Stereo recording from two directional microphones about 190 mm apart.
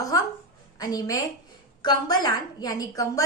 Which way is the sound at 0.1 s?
15° left (ahead or behind).